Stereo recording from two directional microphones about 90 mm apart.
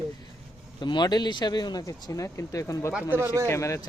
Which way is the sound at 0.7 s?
55° left (ahead or behind).